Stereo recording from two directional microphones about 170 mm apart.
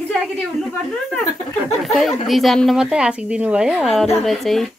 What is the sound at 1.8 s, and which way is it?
A woman's voice, centre (ahead or behind).